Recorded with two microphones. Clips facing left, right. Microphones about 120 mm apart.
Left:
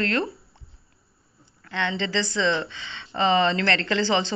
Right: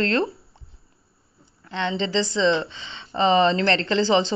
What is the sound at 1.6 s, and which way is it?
A woman's voice, 20° right (ahead or behind).